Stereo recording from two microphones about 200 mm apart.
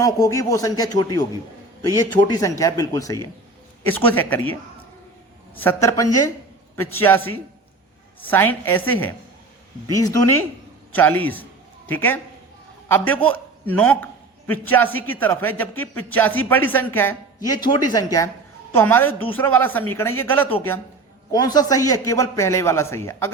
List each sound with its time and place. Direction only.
0.0 s a man's voice: 15° left (ahead or behind)
2.2 s a man's voice: 20° left (ahead or behind)
5.5 s a man's voice: 15° left (ahead or behind)